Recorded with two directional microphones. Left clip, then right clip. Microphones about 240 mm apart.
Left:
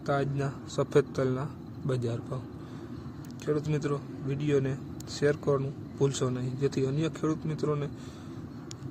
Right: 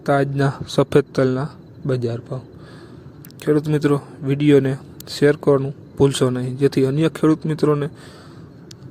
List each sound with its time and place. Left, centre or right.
0.0 s a man's voice: right
3.4 s a man's voice: right